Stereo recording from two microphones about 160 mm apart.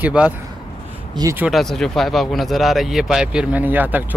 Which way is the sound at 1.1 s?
20° right (ahead or behind).